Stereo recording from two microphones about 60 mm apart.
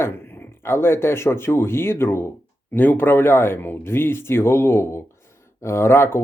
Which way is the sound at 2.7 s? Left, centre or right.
Left.